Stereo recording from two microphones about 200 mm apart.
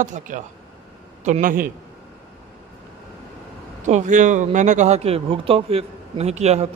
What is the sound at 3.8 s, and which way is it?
Speech, 40° right (ahead or behind).